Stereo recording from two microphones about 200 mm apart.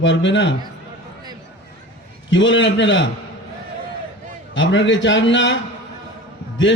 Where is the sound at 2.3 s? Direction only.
65° left (ahead or behind).